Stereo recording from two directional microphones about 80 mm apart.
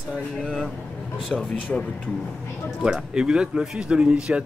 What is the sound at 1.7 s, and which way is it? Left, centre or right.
Speech, centre.